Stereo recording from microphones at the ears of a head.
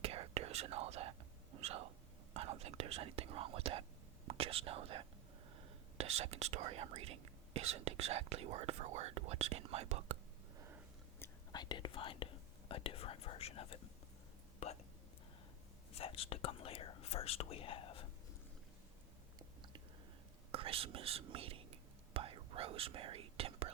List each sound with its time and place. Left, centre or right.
0.0 s whispering: right
2.3 s speech: right
11.5 s speech: left
15.9 s speech: left
20.5 s whispering: right